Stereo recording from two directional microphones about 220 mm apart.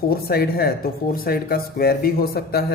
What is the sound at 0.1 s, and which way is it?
Speech, 45° left (ahead or behind).